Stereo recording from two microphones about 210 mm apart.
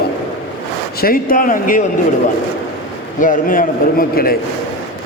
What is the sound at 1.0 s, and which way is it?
Speech, 40° left (ahead or behind).